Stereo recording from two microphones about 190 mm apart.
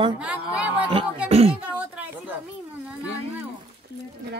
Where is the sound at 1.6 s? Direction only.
5° right (ahead or behind).